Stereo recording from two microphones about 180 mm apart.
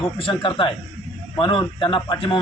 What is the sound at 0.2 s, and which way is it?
A man's voice, 30° left (ahead or behind).